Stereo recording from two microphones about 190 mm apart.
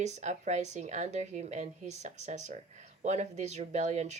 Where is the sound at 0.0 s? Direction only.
35° right (ahead or behind).